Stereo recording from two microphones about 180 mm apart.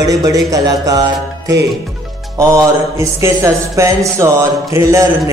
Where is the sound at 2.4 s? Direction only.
15° right (ahead or behind).